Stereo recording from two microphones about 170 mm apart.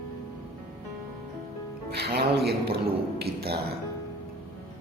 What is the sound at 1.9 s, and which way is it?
Speech, 70° right (ahead or behind).